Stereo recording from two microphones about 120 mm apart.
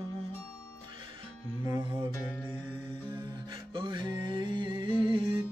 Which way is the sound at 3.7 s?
40° right (ahead or behind).